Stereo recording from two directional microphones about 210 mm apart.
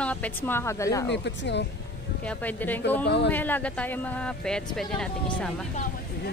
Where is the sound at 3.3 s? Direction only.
10° left (ahead or behind).